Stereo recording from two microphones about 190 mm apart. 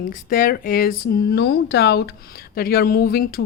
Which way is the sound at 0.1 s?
45° left (ahead or behind).